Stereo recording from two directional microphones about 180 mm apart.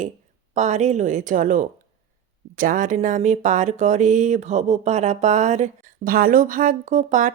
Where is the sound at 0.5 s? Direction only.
40° right (ahead or behind).